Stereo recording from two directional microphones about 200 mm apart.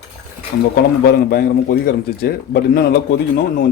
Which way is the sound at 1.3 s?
50° left (ahead or behind).